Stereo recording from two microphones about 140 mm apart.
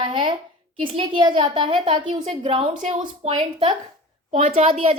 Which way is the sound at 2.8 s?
55° right (ahead or behind).